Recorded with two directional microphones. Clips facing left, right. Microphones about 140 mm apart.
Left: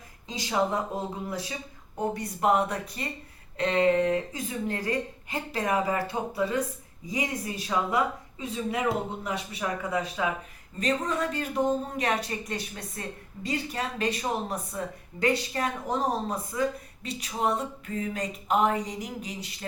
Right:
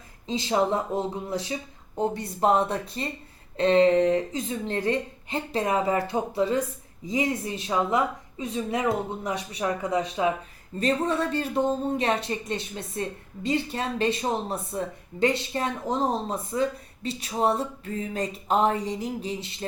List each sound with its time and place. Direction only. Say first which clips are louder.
0.3 s speech: right 4 dB; 30° right (ahead or behind)